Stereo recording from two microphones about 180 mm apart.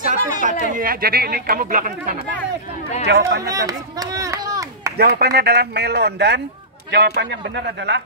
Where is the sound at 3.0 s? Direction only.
65° right (ahead or behind).